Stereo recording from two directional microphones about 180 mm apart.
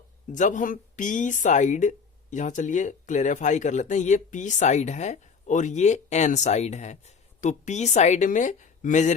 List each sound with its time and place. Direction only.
0.3 s speech: 45° left (ahead or behind)